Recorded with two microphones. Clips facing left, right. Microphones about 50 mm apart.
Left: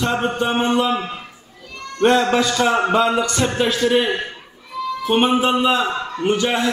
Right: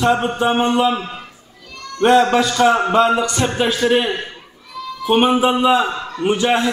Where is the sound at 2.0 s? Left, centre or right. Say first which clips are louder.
Right 3 dB; centre.